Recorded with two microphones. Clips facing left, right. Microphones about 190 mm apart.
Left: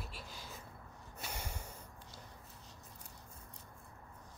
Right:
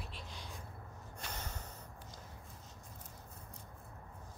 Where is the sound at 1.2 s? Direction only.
10° left (ahead or behind).